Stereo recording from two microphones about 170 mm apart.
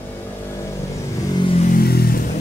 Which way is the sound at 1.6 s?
55° left (ahead or behind).